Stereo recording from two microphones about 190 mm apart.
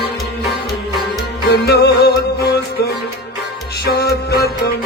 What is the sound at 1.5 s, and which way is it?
Music, 55° left (ahead or behind).